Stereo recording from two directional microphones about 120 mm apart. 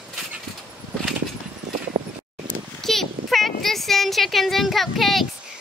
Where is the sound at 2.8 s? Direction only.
Centre (ahead or behind).